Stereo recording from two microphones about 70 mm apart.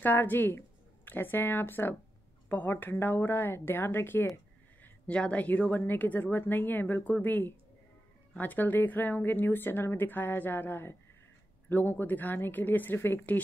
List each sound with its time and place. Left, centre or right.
0.0 s a woman's voice: left
4.8 s a woman's voice: centre